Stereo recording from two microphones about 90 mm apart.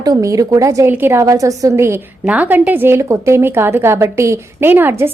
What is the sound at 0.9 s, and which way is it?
Speech, 25° right (ahead or behind).